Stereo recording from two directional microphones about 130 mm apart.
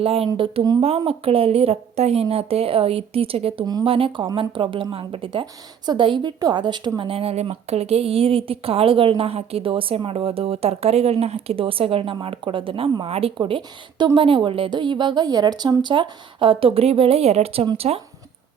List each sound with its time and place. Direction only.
0.0 s a woman's voice: 45° right (ahead or behind)